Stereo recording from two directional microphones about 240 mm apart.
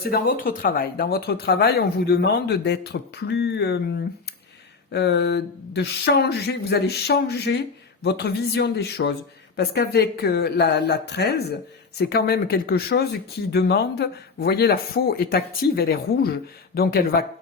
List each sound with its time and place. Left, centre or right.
0.0 s speech: left
4.9 s a woman's voice: left